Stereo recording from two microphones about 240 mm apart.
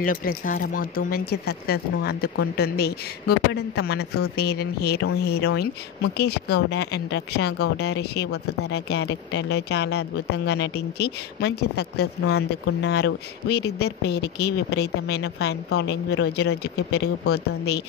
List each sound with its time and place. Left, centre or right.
0.0 s a woman's voice: left